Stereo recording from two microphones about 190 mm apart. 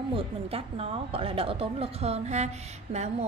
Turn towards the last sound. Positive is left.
turn(degrees=-35)  # may be behind; listen again after turning